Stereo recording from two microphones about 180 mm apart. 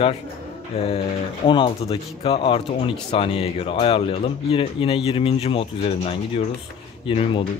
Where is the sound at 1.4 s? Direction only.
30° left (ahead or behind).